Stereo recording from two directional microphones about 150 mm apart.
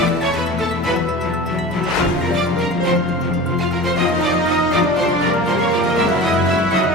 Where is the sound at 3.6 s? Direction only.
Centre (ahead or behind).